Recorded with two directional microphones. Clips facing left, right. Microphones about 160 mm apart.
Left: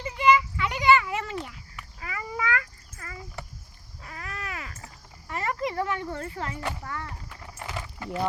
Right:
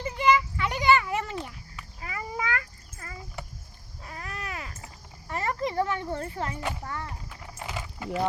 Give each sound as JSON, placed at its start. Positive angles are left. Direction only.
{"t": 0.0, "sound": "children playing", "side_deg": -40}
{"t": 2.0, "sound": "a sound", "side_deg": -30}
{"t": 6.8, "sound": "speech", "side_deg": -30}
{"t": 7.5, "sound": "keys jangling", "side_deg": -20}